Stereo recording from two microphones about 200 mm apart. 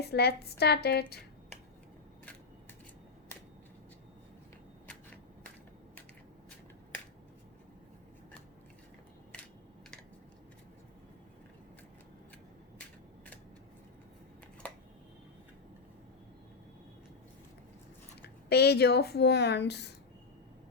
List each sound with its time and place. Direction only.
0.0 s a woman's voice: 55° left (ahead or behind)
14.6 s a sound: 5° left (ahead or behind)
18.4 s a woman's voice: 55° left (ahead or behind)